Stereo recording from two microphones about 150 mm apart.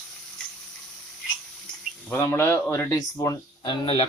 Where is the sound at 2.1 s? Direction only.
15° left (ahead or behind).